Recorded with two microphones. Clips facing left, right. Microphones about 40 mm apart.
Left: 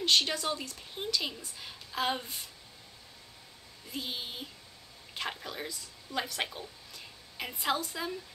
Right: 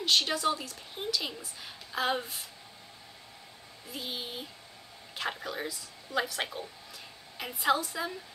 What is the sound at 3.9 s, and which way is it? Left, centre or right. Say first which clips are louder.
Speech: even; centre.